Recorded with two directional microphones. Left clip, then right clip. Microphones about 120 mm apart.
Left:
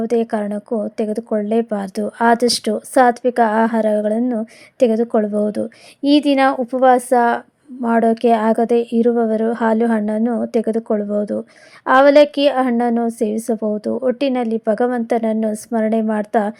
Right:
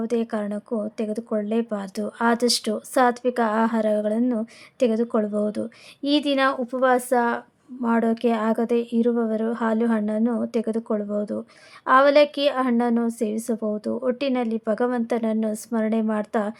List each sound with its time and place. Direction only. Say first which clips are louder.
0.0 s a woman's voice: left 7 dB; 30° left (ahead or behind)